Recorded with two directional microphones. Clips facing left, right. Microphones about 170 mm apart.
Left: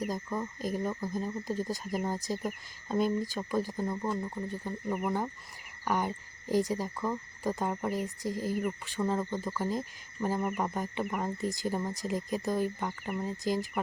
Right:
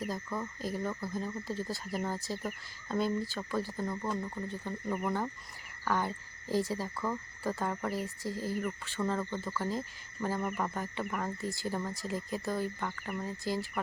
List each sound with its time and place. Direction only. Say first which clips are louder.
0.0 s owl: left 3 dB; 15° left (ahead or behind)